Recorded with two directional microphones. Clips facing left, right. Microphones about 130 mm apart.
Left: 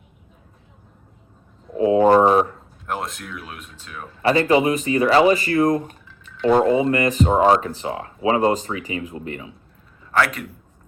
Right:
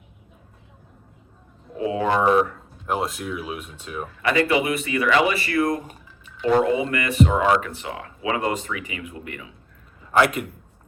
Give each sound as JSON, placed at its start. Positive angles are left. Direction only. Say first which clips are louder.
{"t": 1.7, "sound": "a sound", "louder": "left 8 dB", "side_deg": 30}
{"t": 2.8, "sound": "speech", "louder": "right 3 dB", "side_deg": -5}
{"t": 4.2, "sound": "speech", "louder": "left 4 dB", "side_deg": 35}